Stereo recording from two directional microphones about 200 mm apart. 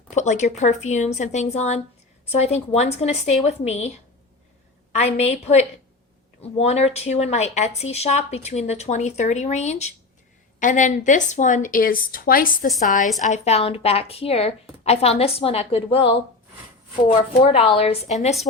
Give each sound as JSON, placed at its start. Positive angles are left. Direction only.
{"t": 0.1, "sound": "speech", "side_deg": 35}
{"t": 13.2, "sound": "a woman's voice", "side_deg": 35}